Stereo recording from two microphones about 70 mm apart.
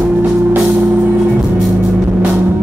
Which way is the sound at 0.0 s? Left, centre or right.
Right.